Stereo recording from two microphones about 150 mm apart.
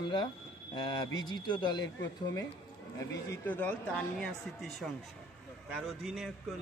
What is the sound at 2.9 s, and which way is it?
Speech, 20° left (ahead or behind).